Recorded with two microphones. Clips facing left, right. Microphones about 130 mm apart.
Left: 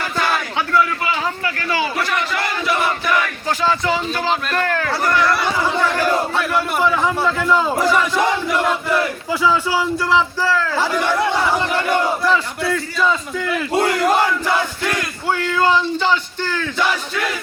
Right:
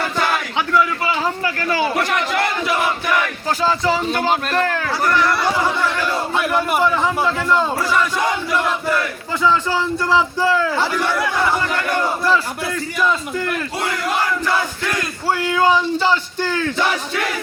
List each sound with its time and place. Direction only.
3.6 s speech: 35° right (ahead or behind)
4.7 s speech: 10° right (ahead or behind)
6.3 s a man's voice: 10° right (ahead or behind)
6.8 s a man's voice: centre (ahead or behind)
9.3 s speech: 5° left (ahead or behind)
10.9 s speech: 20° left (ahead or behind)
12.7 s a man's voice: centre (ahead or behind)
13.7 s battle cry: 30° left (ahead or behind)
15.4 s speech: 15° right (ahead or behind)